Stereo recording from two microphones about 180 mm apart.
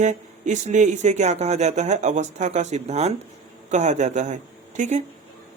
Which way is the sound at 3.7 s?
40° right (ahead or behind).